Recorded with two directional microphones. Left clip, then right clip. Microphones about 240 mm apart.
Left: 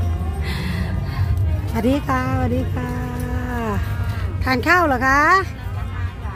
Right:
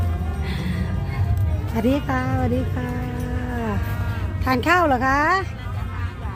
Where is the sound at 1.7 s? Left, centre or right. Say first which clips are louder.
Left 2 dB; centre.